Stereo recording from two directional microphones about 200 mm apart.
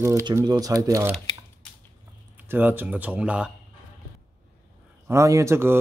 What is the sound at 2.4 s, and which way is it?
Speech, 10° right (ahead or behind).